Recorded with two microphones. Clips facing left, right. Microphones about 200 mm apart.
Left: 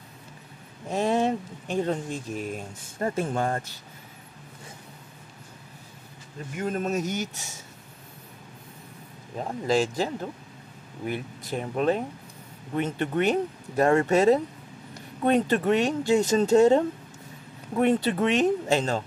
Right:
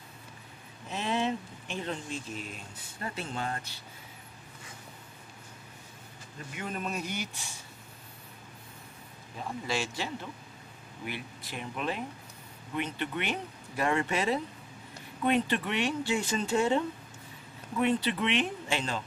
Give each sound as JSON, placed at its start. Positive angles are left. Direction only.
{"t": 0.8, "sound": "speech", "side_deg": 40}
{"t": 6.5, "sound": "speech", "side_deg": 45}
{"t": 9.4, "sound": "speech", "side_deg": 40}